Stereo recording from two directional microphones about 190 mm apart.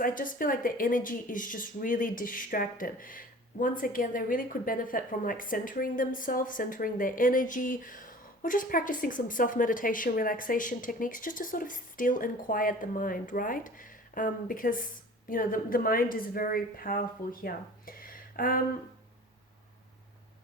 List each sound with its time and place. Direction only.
0.0 s speech: 45° left (ahead or behind)